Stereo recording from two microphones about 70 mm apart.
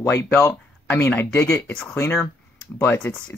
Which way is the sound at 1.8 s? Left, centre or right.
Left.